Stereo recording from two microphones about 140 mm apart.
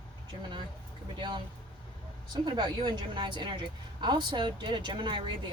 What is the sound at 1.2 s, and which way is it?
Speech, 35° right (ahead or behind).